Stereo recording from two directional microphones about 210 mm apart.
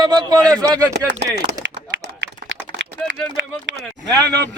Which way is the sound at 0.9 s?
55° right (ahead or behind).